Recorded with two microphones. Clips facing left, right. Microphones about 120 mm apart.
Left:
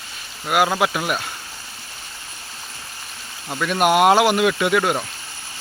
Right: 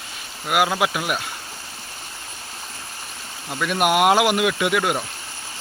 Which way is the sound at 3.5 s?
10° right (ahead or behind).